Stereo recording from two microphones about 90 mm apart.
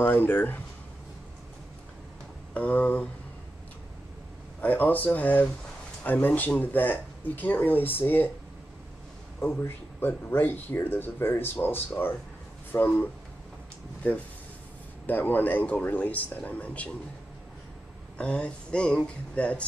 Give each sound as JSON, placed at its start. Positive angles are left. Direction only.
{"t": 0.0, "sound": "speech", "side_deg": 20}
{"t": 2.5, "sound": "speech", "side_deg": 15}
{"t": 4.6, "sound": "speech", "side_deg": 20}
{"t": 9.6, "sound": "speech", "side_deg": 25}
{"t": 15.0, "sound": "speech", "side_deg": 20}
{"t": 18.1, "sound": "speech", "side_deg": 10}